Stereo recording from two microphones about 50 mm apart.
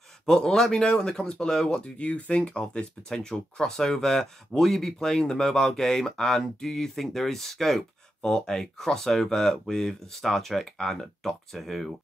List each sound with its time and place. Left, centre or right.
0.3 s speech: centre
2.0 s speech: left; by 11.9 s centre